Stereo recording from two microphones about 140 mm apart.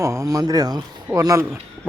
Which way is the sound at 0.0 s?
20° right (ahead or behind).